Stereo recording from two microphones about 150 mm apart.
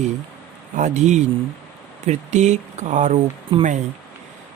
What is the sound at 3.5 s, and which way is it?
Speech, 35° right (ahead or behind).